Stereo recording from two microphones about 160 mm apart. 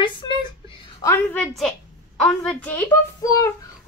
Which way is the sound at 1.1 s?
10° left (ahead or behind).